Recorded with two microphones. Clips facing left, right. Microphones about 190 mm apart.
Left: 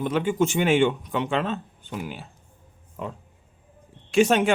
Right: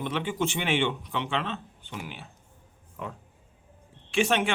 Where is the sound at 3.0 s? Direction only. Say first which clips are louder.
Left 4 dB; 30° left (ahead or behind).